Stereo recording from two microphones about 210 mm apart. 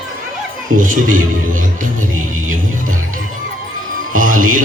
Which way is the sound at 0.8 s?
40° right (ahead or behind).